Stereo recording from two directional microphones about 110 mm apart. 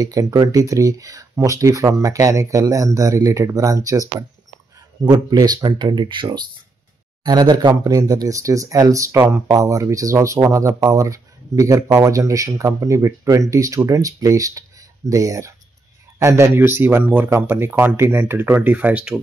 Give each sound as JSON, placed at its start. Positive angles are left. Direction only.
{"t": 0.0, "sound": "speech", "side_deg": -35}